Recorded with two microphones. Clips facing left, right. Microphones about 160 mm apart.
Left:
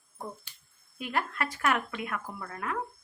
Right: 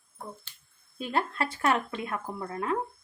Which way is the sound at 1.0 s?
30° right (ahead or behind).